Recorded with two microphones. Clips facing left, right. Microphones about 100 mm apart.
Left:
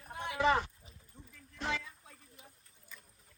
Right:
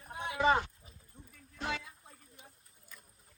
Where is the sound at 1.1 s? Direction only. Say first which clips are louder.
Even; 5° right (ahead or behind).